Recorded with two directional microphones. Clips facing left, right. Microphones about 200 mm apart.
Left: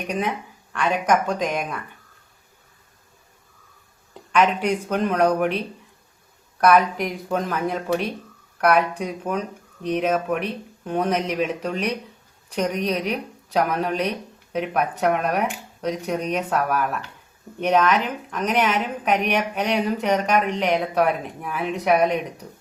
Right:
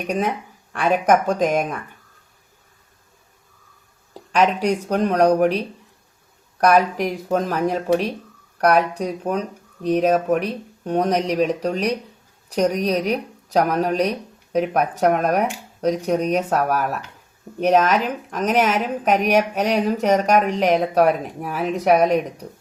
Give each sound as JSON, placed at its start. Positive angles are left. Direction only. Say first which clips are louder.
{"t": 0.7, "sound": "speech", "louder": "right 4 dB", "side_deg": -50}
{"t": 4.1, "sound": "speech", "louder": "right 1 dB", "side_deg": -40}